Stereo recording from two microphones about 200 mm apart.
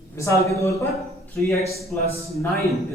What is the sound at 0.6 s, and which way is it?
Speech, 15° left (ahead or behind).